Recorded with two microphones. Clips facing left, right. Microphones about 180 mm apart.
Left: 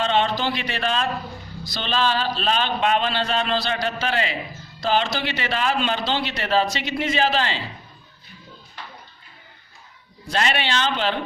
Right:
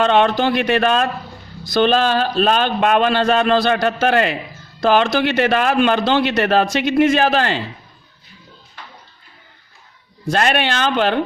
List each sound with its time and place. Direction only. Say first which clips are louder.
0.0 s a man's voice: right 7 dB; 55° right (ahead or behind)
10.2 s a man's voice: right 6 dB; 50° right (ahead or behind)